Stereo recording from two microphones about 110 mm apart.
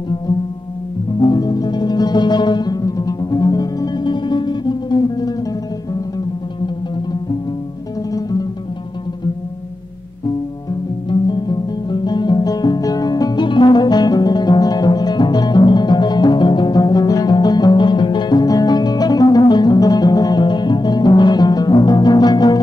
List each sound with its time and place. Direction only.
1.2 s music: 40° left (ahead or behind)
8.1 s music: 35° left (ahead or behind)
11.1 s music: 40° left (ahead or behind)